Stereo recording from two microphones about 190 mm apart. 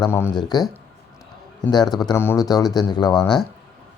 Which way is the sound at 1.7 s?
20° left (ahead or behind).